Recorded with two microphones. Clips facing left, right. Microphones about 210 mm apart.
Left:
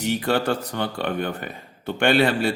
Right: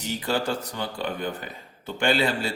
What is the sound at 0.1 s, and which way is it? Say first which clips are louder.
Speech: left 4 dB; 60° left (ahead or behind).